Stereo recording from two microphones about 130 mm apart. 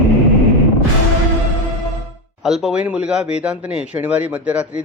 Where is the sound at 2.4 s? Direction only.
5° right (ahead or behind).